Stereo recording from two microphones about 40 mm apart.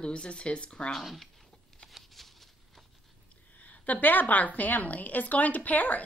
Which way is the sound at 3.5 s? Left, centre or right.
Left.